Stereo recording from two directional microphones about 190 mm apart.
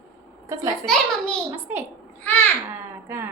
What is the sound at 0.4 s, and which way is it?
Speech, 15° right (ahead or behind).